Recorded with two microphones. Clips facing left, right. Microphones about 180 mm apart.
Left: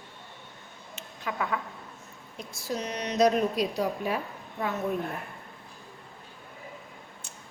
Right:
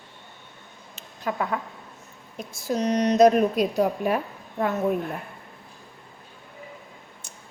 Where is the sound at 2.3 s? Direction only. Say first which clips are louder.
Right 6 dB; 45° right (ahead or behind).